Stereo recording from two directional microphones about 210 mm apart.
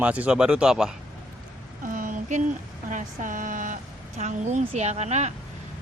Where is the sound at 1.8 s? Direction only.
40° right (ahead or behind).